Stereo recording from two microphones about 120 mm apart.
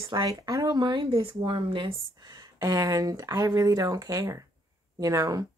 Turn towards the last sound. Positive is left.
turn(degrees=-30)  # may be behind; listen again after turning